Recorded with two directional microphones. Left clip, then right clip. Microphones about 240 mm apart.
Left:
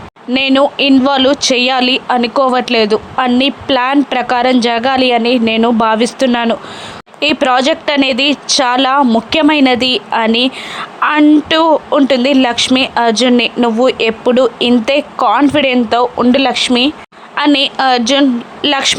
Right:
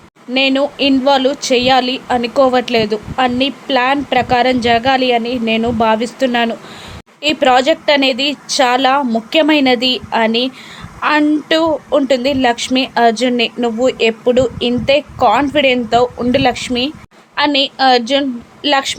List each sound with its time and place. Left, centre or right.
0.3 s a woman's voice: centre